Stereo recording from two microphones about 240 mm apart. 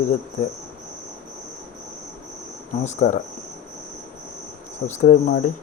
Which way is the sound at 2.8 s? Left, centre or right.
Left.